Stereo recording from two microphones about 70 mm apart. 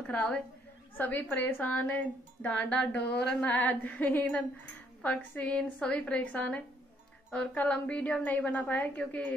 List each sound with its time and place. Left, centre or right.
0.0 s a woman's voice: left